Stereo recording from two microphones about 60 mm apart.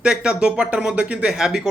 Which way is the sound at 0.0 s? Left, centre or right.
Centre.